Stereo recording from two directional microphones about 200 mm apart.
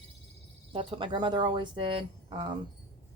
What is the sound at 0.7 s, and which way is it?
Speech, 25° right (ahead or behind).